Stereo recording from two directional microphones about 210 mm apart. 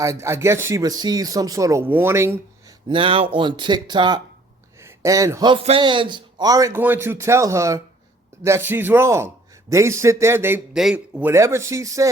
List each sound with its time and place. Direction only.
0.0 s a man's voice: 15° right (ahead or behind)
2.9 s a man's voice: 25° right (ahead or behind)